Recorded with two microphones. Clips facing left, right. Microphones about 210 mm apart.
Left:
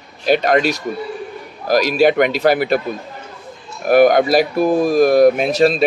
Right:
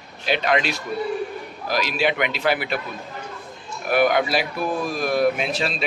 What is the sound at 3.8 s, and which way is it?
Speech, 40° left (ahead or behind).